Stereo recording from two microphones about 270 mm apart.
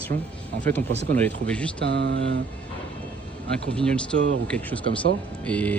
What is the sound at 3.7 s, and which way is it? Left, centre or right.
Speech, centre.